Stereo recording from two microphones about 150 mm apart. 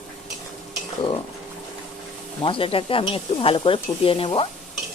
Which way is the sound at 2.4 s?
35° left (ahead or behind).